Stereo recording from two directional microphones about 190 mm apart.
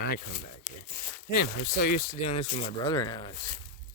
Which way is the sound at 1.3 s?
55° left (ahead or behind).